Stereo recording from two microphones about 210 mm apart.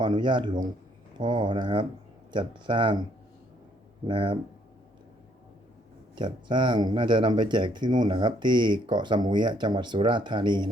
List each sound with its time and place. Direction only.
0.0 s speech: 20° right (ahead or behind)
4.0 s speech: 25° right (ahead or behind)
6.1 s speech: 20° right (ahead or behind)